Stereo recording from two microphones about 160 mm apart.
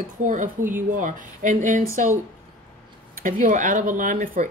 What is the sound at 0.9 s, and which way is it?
Speech, 55° right (ahead or behind).